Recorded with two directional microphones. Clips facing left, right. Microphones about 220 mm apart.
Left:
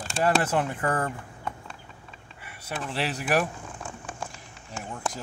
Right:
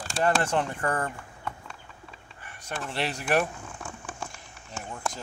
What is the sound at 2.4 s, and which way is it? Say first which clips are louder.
Speech: left 1 dB; 5° left (ahead or behind).